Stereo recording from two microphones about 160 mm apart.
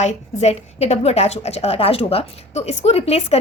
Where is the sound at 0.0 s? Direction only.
45° left (ahead or behind).